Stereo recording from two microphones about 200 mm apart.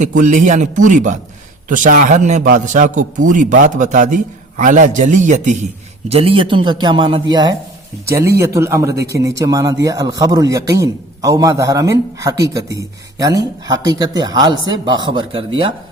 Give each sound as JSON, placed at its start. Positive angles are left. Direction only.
{"t": 0.0, "sound": "a man's voice", "side_deg": -40}